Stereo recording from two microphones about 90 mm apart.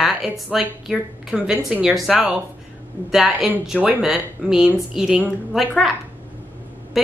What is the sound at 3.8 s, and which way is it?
A woman's voice, 15° right (ahead or behind).